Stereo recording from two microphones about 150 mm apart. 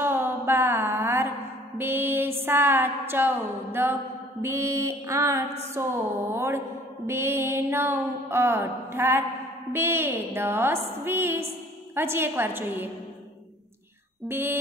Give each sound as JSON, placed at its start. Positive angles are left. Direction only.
{"t": 0.0, "sound": "a sound", "side_deg": -15}
{"t": 1.8, "sound": "music", "side_deg": -15}
{"t": 4.4, "sound": "mantra", "side_deg": -20}
{"t": 14.2, "sound": "mantra", "side_deg": -15}